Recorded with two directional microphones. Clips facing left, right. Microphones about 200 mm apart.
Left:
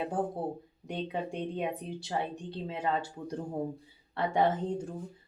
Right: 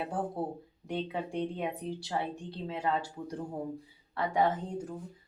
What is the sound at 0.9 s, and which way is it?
A woman's voice, 20° left (ahead or behind).